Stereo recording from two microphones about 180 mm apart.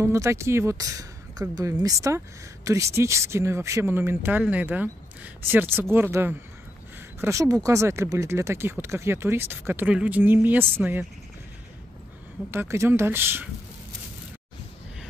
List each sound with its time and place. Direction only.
0.0 s speech: 15° right (ahead or behind)
12.4 s speech: 15° right (ahead or behind)